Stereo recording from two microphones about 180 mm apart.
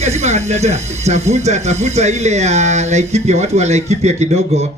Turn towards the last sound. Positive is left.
turn(degrees=-35)  # may be behind; listen again after turning